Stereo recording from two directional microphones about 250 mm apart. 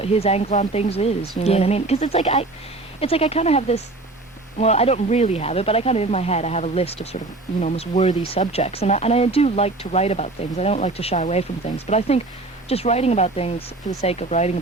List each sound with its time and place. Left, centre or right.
0.0 s speech: left